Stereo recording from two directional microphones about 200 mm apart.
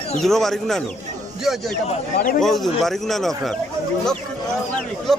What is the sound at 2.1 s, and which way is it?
Speech, 40° left (ahead or behind).